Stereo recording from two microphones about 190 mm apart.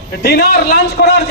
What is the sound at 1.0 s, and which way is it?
Speech, 55° left (ahead or behind).